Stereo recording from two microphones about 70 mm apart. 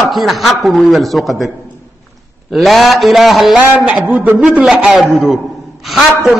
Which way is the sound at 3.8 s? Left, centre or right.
Centre.